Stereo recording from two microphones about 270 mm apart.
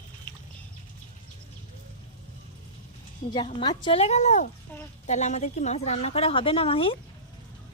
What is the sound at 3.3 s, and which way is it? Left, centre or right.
A woman's voice, centre.